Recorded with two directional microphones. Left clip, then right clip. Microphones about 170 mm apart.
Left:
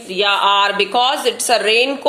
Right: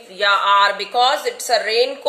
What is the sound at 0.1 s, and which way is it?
A woman's voice, 20° right (ahead or behind).